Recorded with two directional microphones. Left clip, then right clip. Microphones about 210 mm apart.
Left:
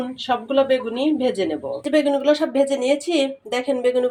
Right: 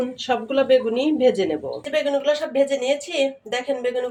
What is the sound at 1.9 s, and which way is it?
A woman's voice, 30° left (ahead or behind).